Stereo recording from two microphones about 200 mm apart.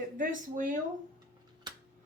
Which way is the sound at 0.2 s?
40° right (ahead or behind).